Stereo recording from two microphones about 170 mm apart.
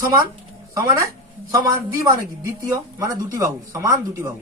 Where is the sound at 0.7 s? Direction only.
20° right (ahead or behind).